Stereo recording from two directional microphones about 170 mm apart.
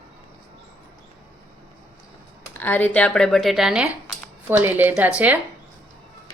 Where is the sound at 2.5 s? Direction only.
10° left (ahead or behind); by 5.4 s 10° right (ahead or behind).